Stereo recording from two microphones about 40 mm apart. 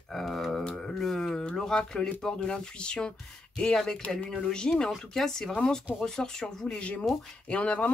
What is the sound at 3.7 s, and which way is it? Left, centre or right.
Speech, centre.